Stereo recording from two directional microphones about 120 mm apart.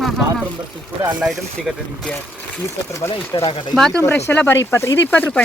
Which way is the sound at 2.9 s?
25° left (ahead or behind).